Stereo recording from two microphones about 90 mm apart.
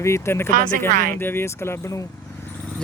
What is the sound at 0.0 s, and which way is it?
Speech, 30° left (ahead or behind).